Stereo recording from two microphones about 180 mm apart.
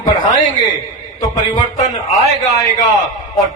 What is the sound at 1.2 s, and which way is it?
A man's voice, 20° left (ahead or behind).